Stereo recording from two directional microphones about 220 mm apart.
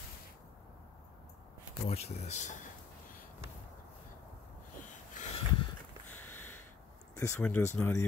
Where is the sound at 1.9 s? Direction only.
30° left (ahead or behind).